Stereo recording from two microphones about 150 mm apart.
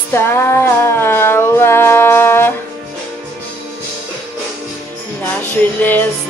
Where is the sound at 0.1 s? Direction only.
15° left (ahead or behind).